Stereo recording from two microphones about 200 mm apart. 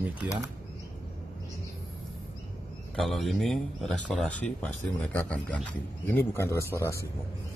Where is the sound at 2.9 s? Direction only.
Centre (ahead or behind).